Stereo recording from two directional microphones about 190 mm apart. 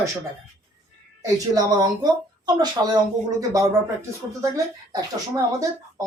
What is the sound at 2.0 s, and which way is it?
Speech, 20° right (ahead or behind).